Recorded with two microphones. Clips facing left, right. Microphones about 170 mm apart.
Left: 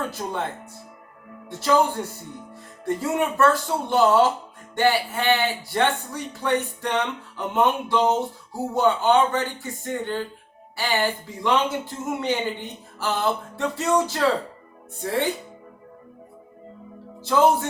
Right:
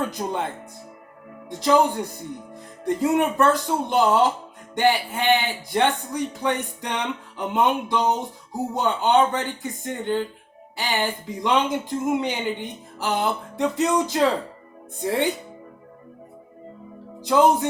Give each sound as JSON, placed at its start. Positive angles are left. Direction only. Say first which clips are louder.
{"t": 0.1, "sound": "speech", "louder": "right 2 dB", "side_deg": -15}
{"t": 1.5, "sound": "speech", "louder": "right 2 dB", "side_deg": -15}
{"t": 17.2, "sound": "speech", "louder": "right 1 dB", "side_deg": -15}